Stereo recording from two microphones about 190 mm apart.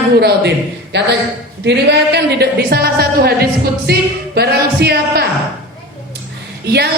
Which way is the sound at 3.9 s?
55° right (ahead or behind).